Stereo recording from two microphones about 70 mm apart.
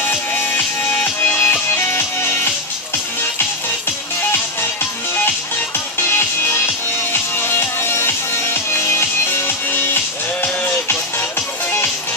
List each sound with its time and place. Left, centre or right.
0.0 s music: left
6.0 s music: left